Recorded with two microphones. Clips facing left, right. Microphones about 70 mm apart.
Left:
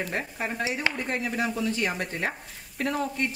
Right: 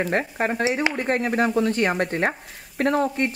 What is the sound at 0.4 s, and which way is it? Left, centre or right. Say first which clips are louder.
Speech: right 5 dB; right.